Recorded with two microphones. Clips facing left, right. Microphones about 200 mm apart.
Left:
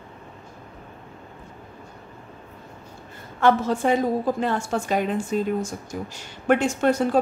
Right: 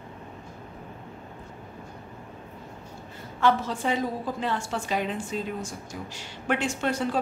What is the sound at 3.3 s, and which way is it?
A woman's voice, 50° left (ahead or behind).